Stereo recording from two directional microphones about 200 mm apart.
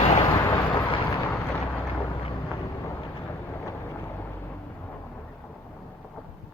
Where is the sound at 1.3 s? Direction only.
10° left (ahead or behind).